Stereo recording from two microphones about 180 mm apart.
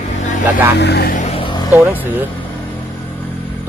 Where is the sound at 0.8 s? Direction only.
65° left (ahead or behind).